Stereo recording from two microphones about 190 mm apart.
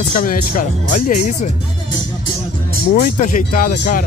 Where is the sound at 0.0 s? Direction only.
45° left (ahead or behind).